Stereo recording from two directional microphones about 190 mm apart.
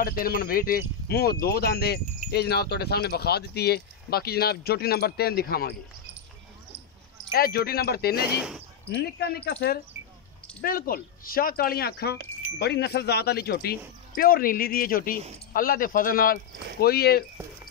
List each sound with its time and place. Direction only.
0.0 s speech: 50° left (ahead or behind)
7.3 s speech: 55° left (ahead or behind)
8.4 s speech: 5° right (ahead or behind)
8.9 s speech: 55° left (ahead or behind)
10.6 s speech: 50° left (ahead or behind)